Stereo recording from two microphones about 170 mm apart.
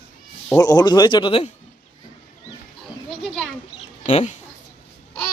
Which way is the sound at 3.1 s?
Centre (ahead or behind).